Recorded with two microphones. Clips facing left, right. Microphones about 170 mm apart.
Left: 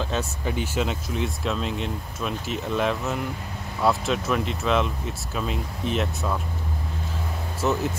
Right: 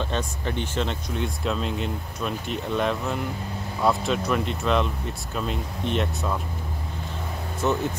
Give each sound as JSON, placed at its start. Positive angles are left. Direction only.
{"t": 0.0, "sound": "speech", "side_deg": 5}
{"t": 7.6, "sound": "speech", "side_deg": 0}